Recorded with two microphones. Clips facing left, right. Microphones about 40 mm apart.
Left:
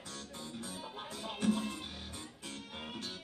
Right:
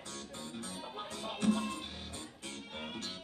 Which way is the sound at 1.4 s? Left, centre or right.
Right.